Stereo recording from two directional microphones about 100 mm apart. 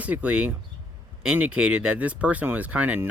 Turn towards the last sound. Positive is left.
turn(degrees=-15)  # may be behind; listen again after turning